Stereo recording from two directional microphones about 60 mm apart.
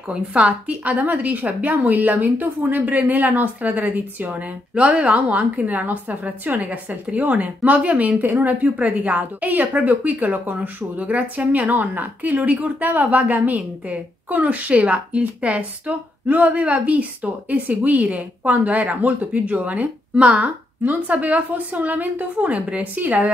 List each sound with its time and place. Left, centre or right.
0.1 s a woman's voice: centre